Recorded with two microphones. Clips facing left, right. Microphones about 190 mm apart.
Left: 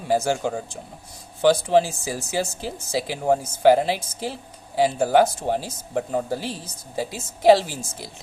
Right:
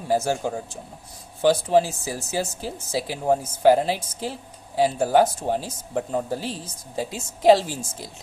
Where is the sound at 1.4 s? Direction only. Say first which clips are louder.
Left 1 dB; 70° left (ahead or behind).